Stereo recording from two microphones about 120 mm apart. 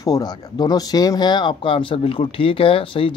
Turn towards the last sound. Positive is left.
turn(degrees=50)  # may be behind; listen again after turning